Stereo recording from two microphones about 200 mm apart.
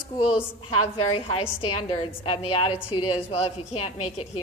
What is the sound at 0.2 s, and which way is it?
A woman's voice, 30° left (ahead or behind).